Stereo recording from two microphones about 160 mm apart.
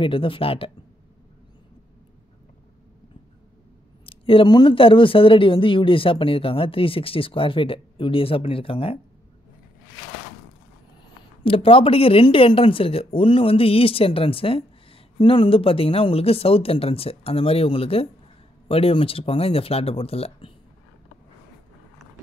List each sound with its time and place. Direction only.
0.0 s speech: 35° left (ahead or behind)
4.0 s speech: 35° left (ahead or behind)
11.4 s speech: 35° left (ahead or behind)